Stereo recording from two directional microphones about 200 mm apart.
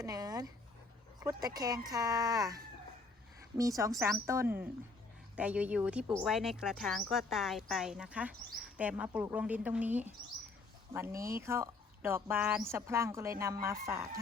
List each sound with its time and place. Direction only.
0.0 s a sound: 20° right (ahead or behind)
1.3 s speech: 20° right (ahead or behind)
3.6 s speech: 15° right (ahead or behind)